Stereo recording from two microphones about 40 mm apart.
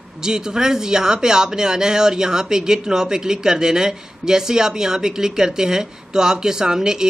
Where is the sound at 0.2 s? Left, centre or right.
Centre.